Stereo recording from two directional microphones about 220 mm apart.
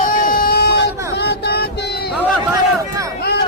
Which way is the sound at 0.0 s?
40° left (ahead or behind).